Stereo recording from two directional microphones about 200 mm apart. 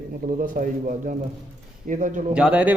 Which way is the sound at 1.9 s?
40° right (ahead or behind).